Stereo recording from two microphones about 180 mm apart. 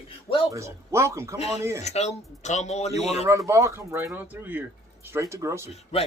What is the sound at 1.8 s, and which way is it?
Speech, 35° left (ahead or behind).